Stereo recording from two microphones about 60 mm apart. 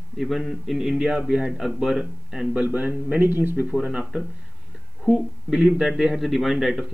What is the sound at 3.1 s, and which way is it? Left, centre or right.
Speech, right.